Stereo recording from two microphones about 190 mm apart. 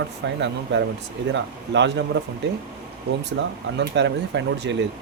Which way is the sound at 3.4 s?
70° right (ahead or behind).